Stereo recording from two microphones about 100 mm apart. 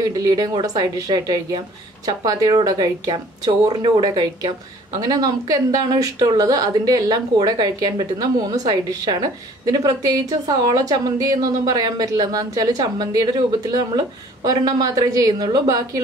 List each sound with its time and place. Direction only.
0.0 s a woman's voice: 40° right (ahead or behind)